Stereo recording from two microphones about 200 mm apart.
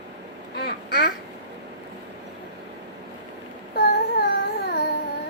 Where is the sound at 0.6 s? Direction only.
55° left (ahead or behind).